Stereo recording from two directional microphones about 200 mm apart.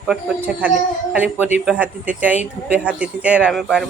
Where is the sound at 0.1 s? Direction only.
10° right (ahead or behind).